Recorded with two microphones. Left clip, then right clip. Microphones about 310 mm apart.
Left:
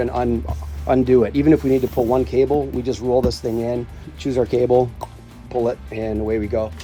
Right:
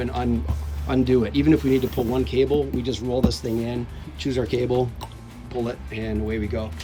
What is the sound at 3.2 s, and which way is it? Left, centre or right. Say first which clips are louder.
Speech: left 5 dB; centre.